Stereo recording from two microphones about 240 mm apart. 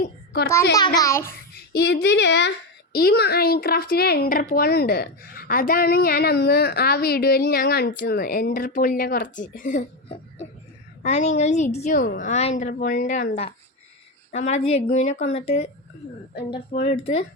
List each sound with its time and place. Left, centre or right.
0.9 s a child's voice: centre
1.3 s a child's voice: left
11.0 s a woman's voice: left
16.7 s a woman's voice: left